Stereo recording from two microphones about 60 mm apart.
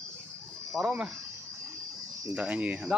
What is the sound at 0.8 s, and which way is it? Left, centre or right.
Speech, right.